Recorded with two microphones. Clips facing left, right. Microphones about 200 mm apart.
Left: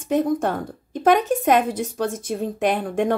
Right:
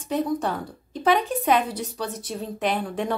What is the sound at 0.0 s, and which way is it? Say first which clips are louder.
A woman's voice: left 4 dB; 50° left (ahead or behind).